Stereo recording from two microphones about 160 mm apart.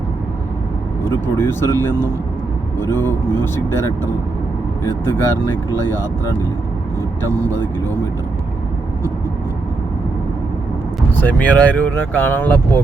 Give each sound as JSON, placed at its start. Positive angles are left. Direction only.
{"t": 1.4, "sound": "speech", "side_deg": 15}
{"t": 11.2, "sound": "speech", "side_deg": 10}